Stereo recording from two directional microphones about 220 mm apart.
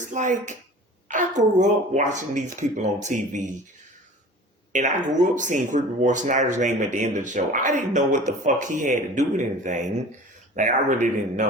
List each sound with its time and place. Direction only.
0.0 s a woman's voice: 35° right (ahead or behind)
4.7 s speech: 35° right (ahead or behind)